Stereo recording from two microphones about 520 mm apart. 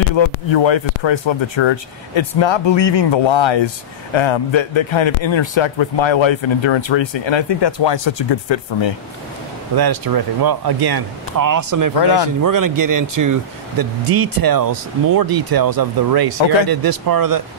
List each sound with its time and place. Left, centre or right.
0.1 s speech: left
9.8 s speech: right
12.0 s speech: left
12.4 s speech: right